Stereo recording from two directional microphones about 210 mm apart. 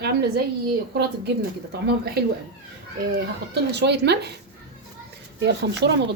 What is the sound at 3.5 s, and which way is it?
Speech, 55° right (ahead or behind).